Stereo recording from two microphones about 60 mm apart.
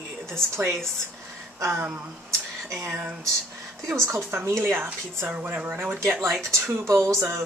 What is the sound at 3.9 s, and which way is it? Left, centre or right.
Speech, right.